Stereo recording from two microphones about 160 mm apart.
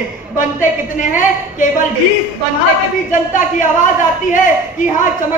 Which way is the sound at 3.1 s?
55° left (ahead or behind).